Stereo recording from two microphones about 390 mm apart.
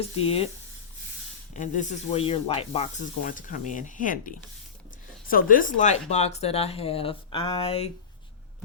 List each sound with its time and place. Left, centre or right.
0.2 s speech: centre
1.5 s snake: centre
5.3 s speech: left